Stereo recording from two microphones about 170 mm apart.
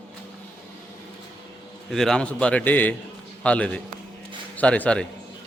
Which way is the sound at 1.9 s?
5° left (ahead or behind).